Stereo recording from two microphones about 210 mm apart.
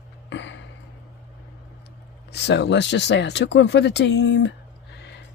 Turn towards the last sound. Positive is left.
turn(degrees=55)  # may be behind; listen again after turning